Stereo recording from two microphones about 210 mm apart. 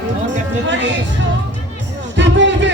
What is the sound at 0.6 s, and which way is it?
Music, 60° right (ahead or behind).